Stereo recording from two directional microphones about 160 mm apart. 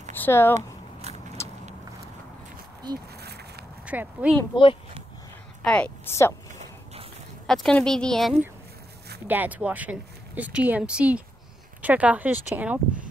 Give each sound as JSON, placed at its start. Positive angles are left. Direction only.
{"t": 0.2, "sound": "speech", "side_deg": 15}
{"t": 1.1, "sound": "a sound", "side_deg": -40}
{"t": 2.8, "sound": "speech", "side_deg": -25}
{"t": 3.2, "sound": "a sound", "side_deg": -90}
{"t": 3.8, "sound": "speech", "side_deg": -10}
{"t": 5.6, "sound": "a woman's voice", "side_deg": 5}
{"t": 7.4, "sound": "a woman's voice", "side_deg": 5}
{"t": 9.3, "sound": "speech", "side_deg": -10}